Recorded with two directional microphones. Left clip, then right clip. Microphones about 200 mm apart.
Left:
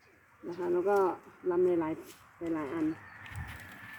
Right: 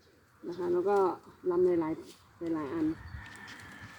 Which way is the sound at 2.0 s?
15° right (ahead or behind).